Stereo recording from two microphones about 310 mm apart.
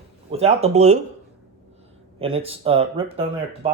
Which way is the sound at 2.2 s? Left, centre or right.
Centre.